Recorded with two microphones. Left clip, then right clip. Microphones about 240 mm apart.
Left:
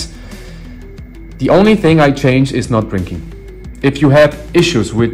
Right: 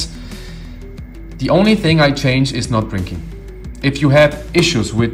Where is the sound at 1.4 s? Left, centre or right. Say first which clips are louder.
Left 4 dB; centre.